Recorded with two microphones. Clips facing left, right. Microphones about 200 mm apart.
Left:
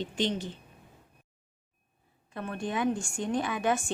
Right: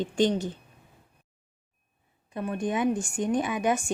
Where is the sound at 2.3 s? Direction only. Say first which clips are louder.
Right 4 dB; 15° right (ahead or behind).